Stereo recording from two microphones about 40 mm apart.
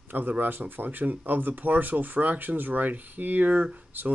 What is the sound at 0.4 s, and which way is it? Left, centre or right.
Speech, right.